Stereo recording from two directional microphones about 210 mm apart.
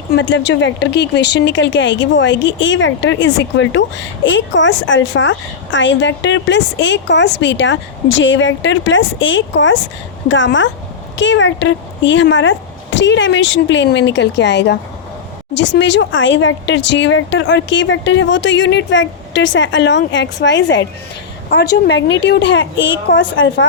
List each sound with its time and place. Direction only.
0.1 s speech: 60° left (ahead or behind)